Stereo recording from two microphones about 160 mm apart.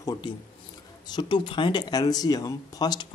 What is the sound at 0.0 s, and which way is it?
Speech, 25° left (ahead or behind).